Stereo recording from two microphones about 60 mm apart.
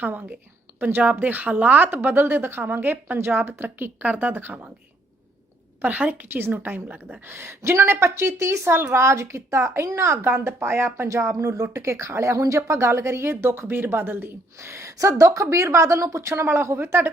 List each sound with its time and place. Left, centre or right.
0.0 s speech: right
4.0 s a woman's voice: right
4.4 s speech: right
5.8 s a woman's voice: right
7.3 s speech: right
11.1 s speech: right